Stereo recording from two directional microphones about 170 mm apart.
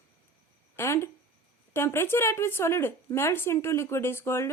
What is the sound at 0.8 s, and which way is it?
A woman's voice, 15° left (ahead or behind).